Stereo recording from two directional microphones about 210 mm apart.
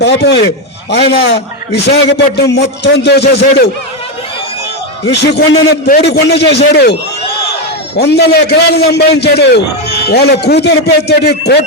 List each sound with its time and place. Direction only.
0.0 s a man's voice: 55° left (ahead or behind)
5.1 s a man's voice: 55° left (ahead or behind)
6.7 s a sound: 50° left (ahead or behind)
7.9 s a man's voice: 50° left (ahead or behind)